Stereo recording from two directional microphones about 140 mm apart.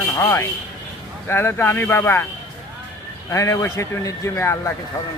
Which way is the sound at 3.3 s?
20° left (ahead or behind).